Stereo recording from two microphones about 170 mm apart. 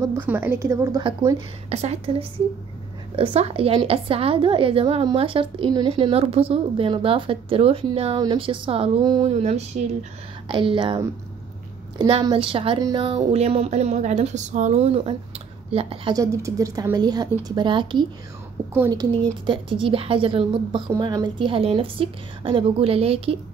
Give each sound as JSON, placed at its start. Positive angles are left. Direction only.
{"t": 0.0, "sound": "a woman's voice", "side_deg": -15}
{"t": 1.7, "sound": "a woman's voice", "side_deg": -40}
{"t": 3.3, "sound": "a woman's voice", "side_deg": -35}
{"t": 12.1, "sound": "a woman's voice", "side_deg": -30}
{"t": 19.4, "sound": "a woman's voice", "side_deg": -30}